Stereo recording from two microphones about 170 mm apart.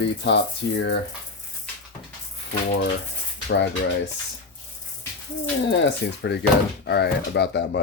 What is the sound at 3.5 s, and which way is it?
Speech, 90° left.